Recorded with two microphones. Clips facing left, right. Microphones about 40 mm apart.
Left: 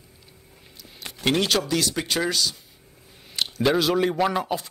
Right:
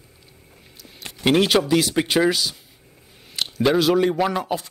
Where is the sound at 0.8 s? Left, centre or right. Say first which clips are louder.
Right 4 dB; centre.